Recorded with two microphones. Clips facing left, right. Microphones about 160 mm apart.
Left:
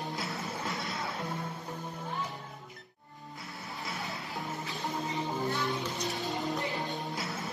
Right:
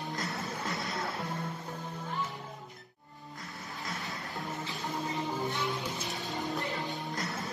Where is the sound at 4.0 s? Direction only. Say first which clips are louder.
Left 1 dB; centre (ahead or behind).